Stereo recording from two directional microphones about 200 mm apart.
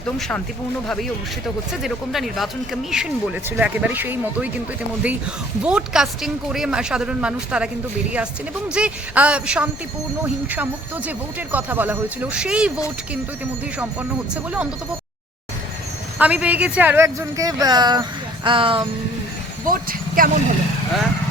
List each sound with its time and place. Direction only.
0.2 s speech: 5° left (ahead or behind)
1.8 s speech: centre (ahead or behind)
8.7 s speech: 5° right (ahead or behind)
16.1 s speech: 5° right (ahead or behind); by 18.9 s 25° right (ahead or behind)
19.6 s speech: 45° right (ahead or behind)